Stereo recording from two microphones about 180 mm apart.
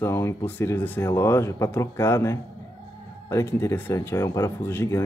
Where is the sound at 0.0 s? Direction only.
15° left (ahead or behind).